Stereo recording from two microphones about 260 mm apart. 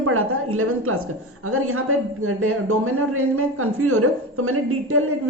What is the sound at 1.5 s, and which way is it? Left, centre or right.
A woman's voice, right.